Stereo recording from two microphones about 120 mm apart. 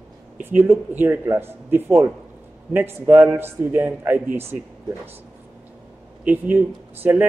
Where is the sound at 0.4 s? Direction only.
15° right (ahead or behind).